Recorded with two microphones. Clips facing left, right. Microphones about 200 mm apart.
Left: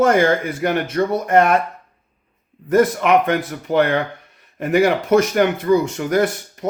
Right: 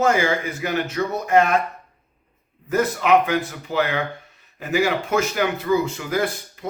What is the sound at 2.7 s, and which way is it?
Speech, 55° left (ahead or behind).